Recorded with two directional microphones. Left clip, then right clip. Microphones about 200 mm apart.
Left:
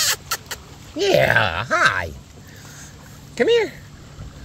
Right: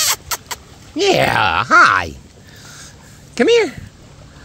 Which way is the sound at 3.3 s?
55° right (ahead or behind).